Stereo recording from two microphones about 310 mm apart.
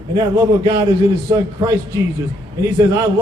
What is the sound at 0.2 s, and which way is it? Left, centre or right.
A man's voice, centre.